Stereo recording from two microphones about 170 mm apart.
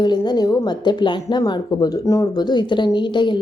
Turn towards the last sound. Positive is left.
turn(degrees=25)  # may be behind; listen again after turning